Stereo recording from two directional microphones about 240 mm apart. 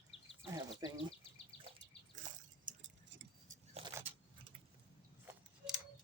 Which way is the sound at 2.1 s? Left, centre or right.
Right.